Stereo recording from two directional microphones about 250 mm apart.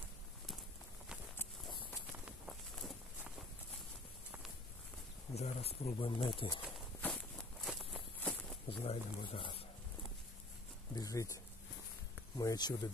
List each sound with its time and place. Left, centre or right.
2.1 s walk: centre
5.3 s speech: left
7.0 s walk: centre
8.8 s speech: left
11.0 s speech: centre
12.4 s speech: centre